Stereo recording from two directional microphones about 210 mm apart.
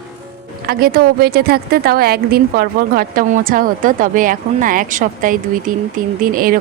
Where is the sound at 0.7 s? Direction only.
45° right (ahead or behind).